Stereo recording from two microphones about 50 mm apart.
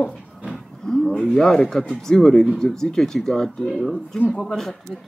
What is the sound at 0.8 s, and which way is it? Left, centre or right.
Cattle, centre.